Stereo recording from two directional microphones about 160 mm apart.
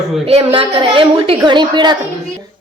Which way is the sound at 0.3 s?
35° right (ahead or behind).